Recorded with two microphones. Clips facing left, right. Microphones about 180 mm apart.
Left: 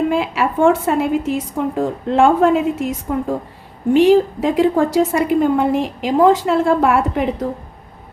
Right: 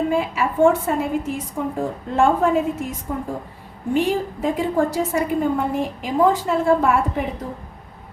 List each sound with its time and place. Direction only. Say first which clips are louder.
0.1 s a woman's voice: left 3 dB; 80° left